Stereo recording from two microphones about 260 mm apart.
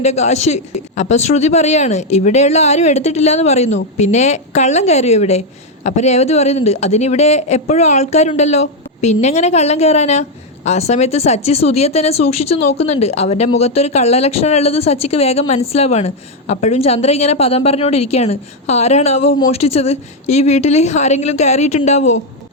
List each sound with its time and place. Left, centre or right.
0.0 s speech: left